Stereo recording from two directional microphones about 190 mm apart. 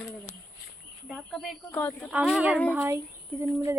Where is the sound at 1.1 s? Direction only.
Centre (ahead or behind).